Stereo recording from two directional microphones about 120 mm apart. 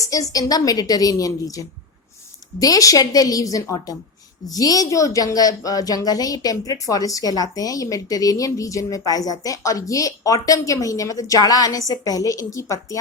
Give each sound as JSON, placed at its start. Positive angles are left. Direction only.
{"t": 0.0, "sound": "speech", "side_deg": 30}